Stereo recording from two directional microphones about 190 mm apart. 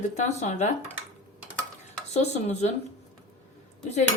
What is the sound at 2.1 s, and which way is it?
Cutlery, 35° left (ahead or behind).